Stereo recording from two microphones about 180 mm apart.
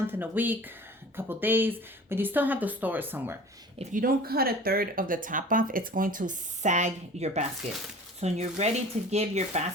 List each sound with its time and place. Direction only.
0.1 s speech: 10° right (ahead or behind)
3.8 s speech: 50° right (ahead or behind)